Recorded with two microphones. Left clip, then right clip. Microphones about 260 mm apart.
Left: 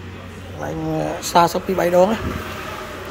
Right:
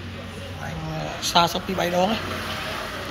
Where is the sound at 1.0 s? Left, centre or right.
Left.